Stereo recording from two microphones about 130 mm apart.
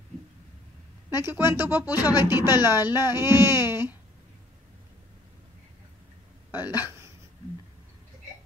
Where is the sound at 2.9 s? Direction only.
20° right (ahead or behind).